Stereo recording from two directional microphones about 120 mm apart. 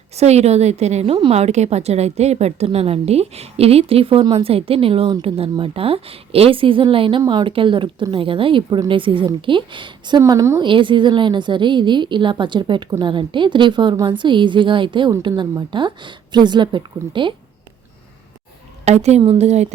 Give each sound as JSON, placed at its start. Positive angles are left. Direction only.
{"t": 0.2, "sound": "a woman's voice", "side_deg": -65}
{"t": 10.2, "sound": "a woman's voice", "side_deg": -30}
{"t": 10.6, "sound": "a woman's voice", "side_deg": -45}
{"t": 18.9, "sound": "a woman's voice", "side_deg": -65}